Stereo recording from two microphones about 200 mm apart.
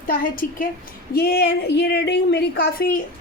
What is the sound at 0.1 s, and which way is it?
A woman's voice, 45° left (ahead or behind).